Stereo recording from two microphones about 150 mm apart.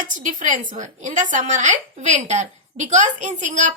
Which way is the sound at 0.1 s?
60° right (ahead or behind).